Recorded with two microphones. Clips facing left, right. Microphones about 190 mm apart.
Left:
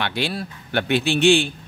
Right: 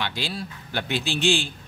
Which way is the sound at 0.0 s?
60° left (ahead or behind).